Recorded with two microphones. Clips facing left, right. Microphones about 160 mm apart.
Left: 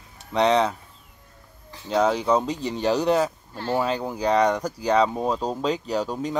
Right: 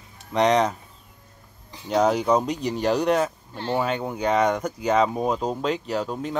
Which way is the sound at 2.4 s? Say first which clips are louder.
Right 1 dB; 30° left (ahead or behind).